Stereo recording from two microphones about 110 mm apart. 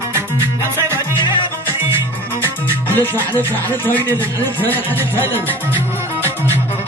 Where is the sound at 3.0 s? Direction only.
20° left (ahead or behind).